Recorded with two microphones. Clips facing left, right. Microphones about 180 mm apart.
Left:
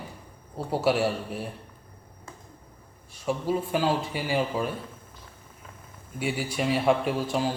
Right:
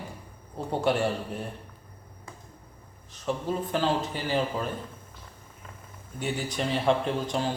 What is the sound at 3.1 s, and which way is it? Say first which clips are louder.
Speech: left 2 dB; 10° left (ahead or behind).